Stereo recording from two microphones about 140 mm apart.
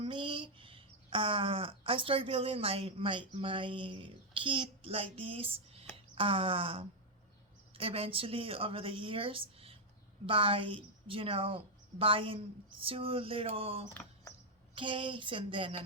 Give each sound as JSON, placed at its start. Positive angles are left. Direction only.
{"t": 0.0, "sound": "a woman's voice", "side_deg": -35}